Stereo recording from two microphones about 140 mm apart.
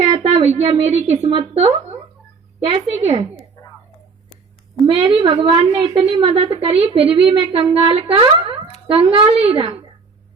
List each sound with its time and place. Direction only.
0.0 s a woman's voice: 50° right (ahead or behind)
4.9 s a woman's voice: 40° right (ahead or behind)